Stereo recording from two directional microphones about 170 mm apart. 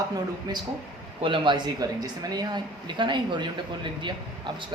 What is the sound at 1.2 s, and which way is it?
Speech, 30° right (ahead or behind).